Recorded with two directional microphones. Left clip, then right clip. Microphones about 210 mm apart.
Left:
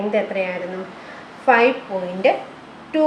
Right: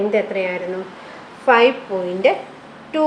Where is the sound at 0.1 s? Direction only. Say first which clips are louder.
Right 2 dB; 25° right (ahead or behind).